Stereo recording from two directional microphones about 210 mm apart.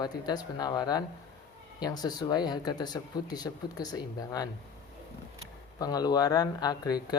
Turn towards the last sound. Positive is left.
turn(degrees=20)  # may be behind; listen again after turning